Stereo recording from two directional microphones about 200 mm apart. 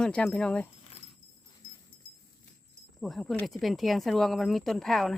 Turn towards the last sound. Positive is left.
turn(degrees=0)  # may be behind; listen again after turning